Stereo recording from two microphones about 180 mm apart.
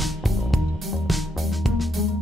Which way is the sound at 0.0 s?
Centre (ahead or behind).